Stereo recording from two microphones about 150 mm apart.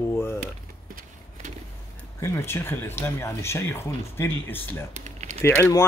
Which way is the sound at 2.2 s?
15° left (ahead or behind).